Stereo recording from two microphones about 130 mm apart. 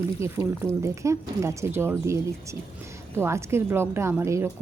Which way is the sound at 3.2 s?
20° right (ahead or behind).